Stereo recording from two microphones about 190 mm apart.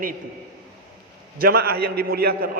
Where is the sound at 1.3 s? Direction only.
55° right (ahead or behind).